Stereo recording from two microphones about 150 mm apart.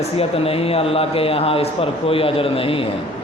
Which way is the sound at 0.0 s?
40° left (ahead or behind).